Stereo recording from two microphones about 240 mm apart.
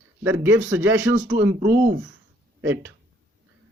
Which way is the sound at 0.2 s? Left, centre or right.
Centre.